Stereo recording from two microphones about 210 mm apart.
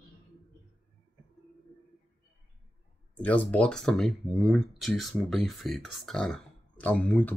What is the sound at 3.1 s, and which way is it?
Speech, 5° left (ahead or behind).